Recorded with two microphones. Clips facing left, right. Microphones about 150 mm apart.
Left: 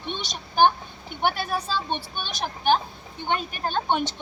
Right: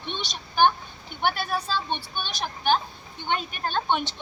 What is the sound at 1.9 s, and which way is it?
A child's voice, 45° left (ahead or behind).